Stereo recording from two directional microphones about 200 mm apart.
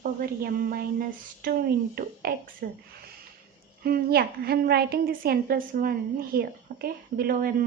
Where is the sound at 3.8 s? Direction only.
50° right (ahead or behind).